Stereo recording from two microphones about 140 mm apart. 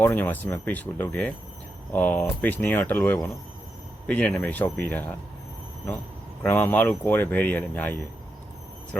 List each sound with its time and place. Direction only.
0.0 s speech: 15° left (ahead or behind)
6.4 s speech: 15° left (ahead or behind)